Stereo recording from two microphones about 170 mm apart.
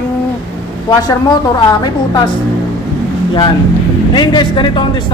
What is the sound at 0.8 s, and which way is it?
A woman's voice, 25° left (ahead or behind).